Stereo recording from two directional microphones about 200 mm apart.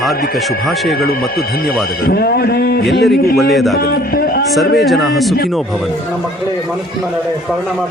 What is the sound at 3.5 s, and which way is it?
Speech, centre (ahead or behind).